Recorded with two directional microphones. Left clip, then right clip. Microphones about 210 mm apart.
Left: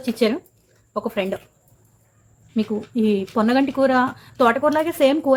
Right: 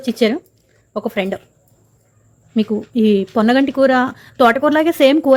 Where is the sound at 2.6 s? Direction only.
30° right (ahead or behind).